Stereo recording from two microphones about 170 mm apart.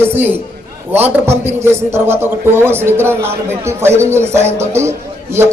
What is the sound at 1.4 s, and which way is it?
A man's voice, 15° right (ahead or behind).